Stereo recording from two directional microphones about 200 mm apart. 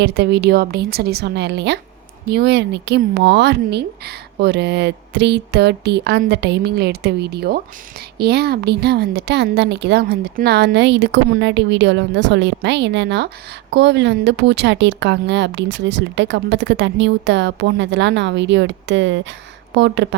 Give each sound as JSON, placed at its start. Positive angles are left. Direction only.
{"t": 0.0, "sound": "a woman's voice", "side_deg": -55}